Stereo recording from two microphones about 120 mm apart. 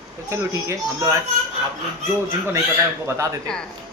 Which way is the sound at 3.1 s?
25° right (ahead or behind).